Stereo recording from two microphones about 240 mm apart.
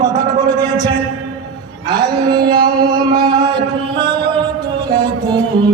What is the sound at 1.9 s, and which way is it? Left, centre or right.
Music, centre.